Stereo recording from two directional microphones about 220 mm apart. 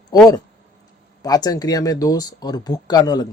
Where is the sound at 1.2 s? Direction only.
15° left (ahead or behind).